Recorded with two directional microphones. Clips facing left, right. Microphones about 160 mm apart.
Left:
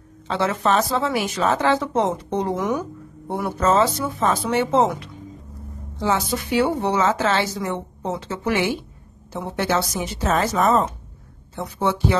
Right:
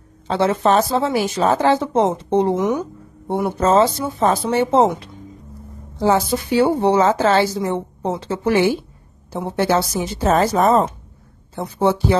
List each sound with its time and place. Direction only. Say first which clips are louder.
0.3 s a woman's voice: right 4 dB; 30° right (ahead or behind)